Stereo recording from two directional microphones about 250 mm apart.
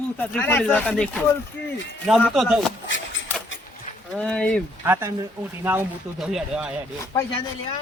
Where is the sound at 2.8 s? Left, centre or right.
Left.